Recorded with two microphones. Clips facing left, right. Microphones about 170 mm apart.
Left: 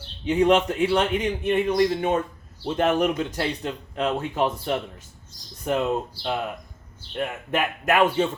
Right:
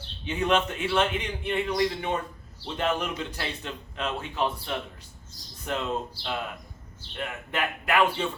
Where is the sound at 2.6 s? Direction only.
40° left (ahead or behind).